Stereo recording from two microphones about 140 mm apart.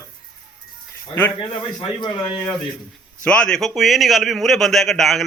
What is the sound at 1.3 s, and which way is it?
Speech, 35° left (ahead or behind).